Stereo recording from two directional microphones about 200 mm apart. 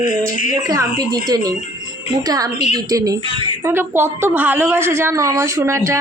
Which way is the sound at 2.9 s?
15° right (ahead or behind).